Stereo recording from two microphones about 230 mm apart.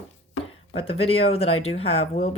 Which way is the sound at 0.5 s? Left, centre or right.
Left.